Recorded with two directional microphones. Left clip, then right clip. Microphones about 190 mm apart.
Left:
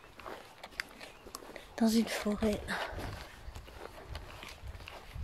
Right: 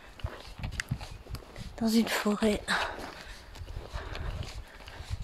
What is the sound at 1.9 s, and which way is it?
Speech, 15° right (ahead or behind).